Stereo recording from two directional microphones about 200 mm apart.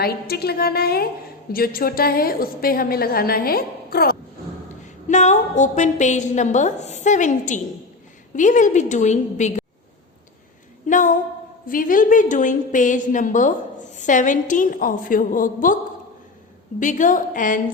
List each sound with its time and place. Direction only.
0.0 s a woman's voice: 50° left (ahead or behind)
5.0 s a woman's voice: 35° left (ahead or behind)
10.8 s a woman's voice: 40° left (ahead or behind)
16.8 s a woman's voice: 40° left (ahead or behind)